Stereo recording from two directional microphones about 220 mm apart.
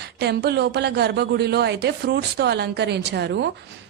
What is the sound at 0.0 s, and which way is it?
A woman's voice, 50° right (ahead or behind).